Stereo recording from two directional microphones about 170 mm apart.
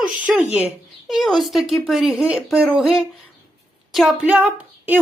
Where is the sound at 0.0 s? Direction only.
10° right (ahead or behind).